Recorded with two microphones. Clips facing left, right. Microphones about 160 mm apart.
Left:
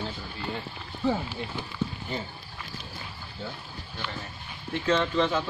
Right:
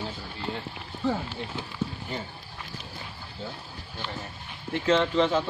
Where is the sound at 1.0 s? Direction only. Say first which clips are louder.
Left 1 dB; 5° left (ahead or behind).